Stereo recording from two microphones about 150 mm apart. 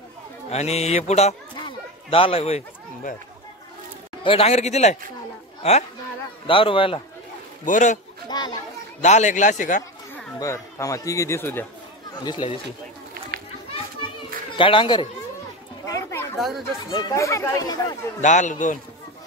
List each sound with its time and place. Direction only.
0.5 s speech: 45° left (ahead or behind)
4.2 s speech: 40° left (ahead or behind)
6.4 s speech: 35° left (ahead or behind)
7.6 s a man's voice: 60° left (ahead or behind)
8.3 s children playing: 30° left (ahead or behind)
9.0 s a man's voice: 50° left (ahead or behind)
10.4 s speech: 20° left (ahead or behind)
14.6 s speech: 35° left (ahead or behind)
15.9 s children playing: 20° left (ahead or behind)
16.3 s a child's voice: centre (ahead or behind)
16.9 s speech: 20° left (ahead or behind)
18.2 s a man's voice: 55° left (ahead or behind)